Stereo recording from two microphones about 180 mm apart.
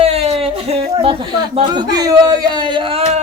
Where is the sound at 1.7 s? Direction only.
20° right (ahead or behind).